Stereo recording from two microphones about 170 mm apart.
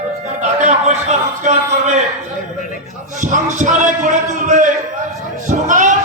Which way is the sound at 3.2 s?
50° right (ahead or behind).